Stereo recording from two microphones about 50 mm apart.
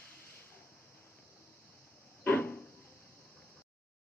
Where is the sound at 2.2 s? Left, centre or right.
Left.